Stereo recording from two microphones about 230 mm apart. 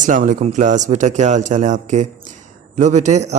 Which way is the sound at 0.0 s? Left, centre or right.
Right.